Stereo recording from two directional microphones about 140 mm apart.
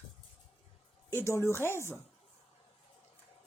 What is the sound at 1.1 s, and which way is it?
Speech, 20° left (ahead or behind).